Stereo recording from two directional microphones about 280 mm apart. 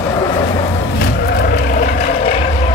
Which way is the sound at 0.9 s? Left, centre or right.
Left.